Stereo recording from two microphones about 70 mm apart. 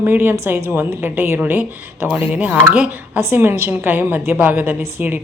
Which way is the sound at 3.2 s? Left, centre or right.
Right.